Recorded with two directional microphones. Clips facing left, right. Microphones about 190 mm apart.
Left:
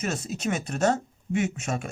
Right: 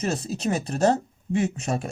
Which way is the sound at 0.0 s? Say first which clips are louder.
Right 3 dB; 35° right (ahead or behind).